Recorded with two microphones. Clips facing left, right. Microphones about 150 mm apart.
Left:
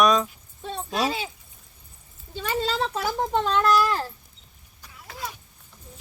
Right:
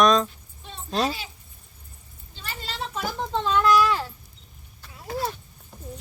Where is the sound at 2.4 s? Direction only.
65° left (ahead or behind).